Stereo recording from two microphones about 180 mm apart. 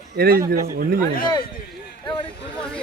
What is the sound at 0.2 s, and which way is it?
Speech, 55° right (ahead or behind).